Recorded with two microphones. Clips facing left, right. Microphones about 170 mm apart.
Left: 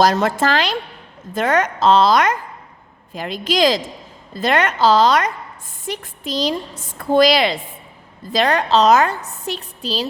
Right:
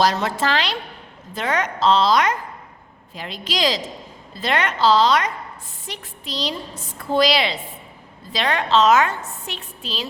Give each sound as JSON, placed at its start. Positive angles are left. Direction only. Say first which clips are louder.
{"t": 0.0, "sound": "a woman's voice", "louder": "left 4 dB", "side_deg": 50}